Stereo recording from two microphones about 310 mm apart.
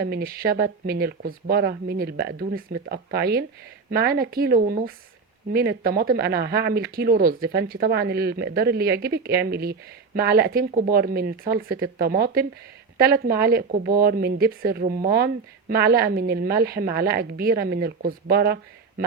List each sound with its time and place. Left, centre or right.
0.0 s speech: right